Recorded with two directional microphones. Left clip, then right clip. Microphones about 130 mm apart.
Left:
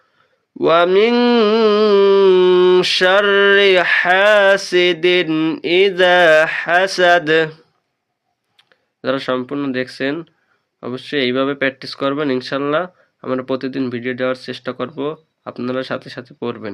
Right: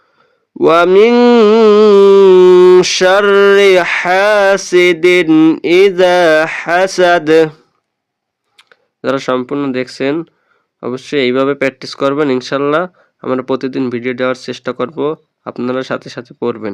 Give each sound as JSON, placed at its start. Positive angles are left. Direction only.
{"t": 0.6, "sound": "mantra", "side_deg": -50}
{"t": 8.5, "sound": "speech", "side_deg": -50}